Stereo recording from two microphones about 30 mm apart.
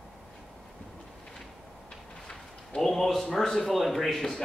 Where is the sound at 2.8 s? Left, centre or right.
Centre.